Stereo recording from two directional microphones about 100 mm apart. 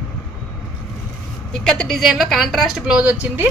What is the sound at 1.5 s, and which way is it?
Speech, 5° left (ahead or behind).